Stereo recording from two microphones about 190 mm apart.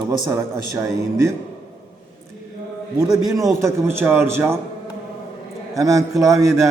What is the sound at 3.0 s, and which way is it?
A man's voice, 20° right (ahead or behind).